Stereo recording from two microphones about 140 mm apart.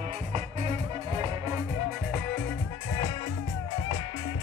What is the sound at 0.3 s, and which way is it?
Music, 45° right (ahead or behind).